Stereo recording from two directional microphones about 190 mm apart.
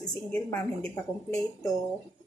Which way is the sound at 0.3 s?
10° left (ahead or behind).